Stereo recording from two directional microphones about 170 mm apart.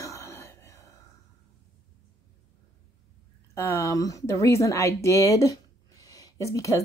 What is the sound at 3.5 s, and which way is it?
Speech, 15° left (ahead or behind).